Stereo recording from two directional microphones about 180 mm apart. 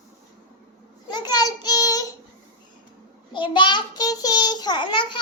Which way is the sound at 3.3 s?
25° left (ahead or behind).